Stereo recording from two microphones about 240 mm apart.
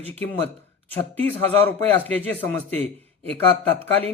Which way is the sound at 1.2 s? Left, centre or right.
Centre.